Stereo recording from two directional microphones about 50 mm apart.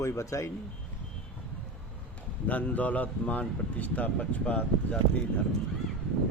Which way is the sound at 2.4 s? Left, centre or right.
Left.